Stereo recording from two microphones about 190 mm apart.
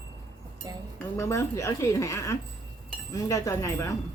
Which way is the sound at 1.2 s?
15° left (ahead or behind).